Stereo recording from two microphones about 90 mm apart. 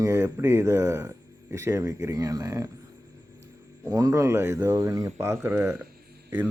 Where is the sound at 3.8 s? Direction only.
40° right (ahead or behind).